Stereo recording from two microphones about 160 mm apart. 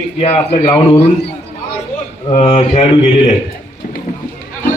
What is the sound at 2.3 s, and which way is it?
Speech, 35° left (ahead or behind).